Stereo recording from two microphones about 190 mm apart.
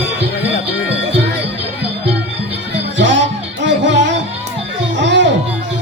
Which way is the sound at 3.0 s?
70° right (ahead or behind).